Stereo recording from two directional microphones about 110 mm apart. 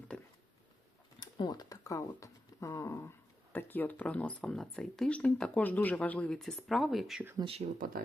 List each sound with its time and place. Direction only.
1.2 s speech: 40° left (ahead or behind); by 7.2 s centre (ahead or behind)
7.4 s speech: 65° right (ahead or behind)